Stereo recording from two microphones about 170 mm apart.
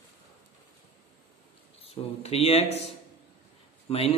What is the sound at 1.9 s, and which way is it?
A man's voice, 40° left (ahead or behind).